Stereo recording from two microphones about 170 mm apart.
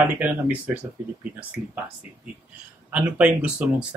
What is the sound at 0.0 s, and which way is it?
Speech, 10° right (ahead or behind).